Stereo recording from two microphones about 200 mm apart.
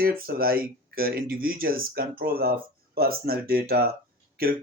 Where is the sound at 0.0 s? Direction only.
50° right (ahead or behind).